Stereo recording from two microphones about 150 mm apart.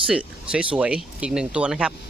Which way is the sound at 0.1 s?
5° right (ahead or behind).